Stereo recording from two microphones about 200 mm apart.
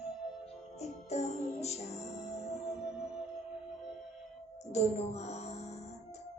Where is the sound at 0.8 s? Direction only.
35° left (ahead or behind).